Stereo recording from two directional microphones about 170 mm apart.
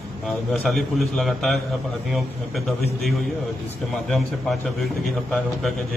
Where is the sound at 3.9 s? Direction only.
Centre (ahead or behind).